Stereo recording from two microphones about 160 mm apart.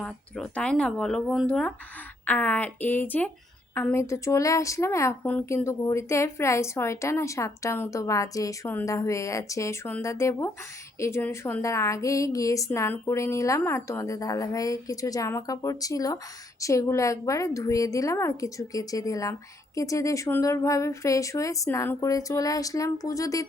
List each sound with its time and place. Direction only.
0.0 s a woman's voice: 5° left (ahead or behind); by 23.5 s 20° left (ahead or behind)